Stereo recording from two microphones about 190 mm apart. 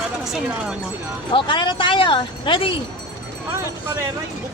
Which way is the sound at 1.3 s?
25° left (ahead or behind).